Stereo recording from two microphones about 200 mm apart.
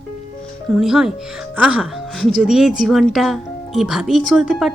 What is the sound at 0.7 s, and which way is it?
Speech, centre (ahead or behind).